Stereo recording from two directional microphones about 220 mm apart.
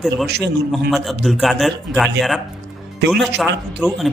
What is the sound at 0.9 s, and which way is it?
Speech, centre (ahead or behind).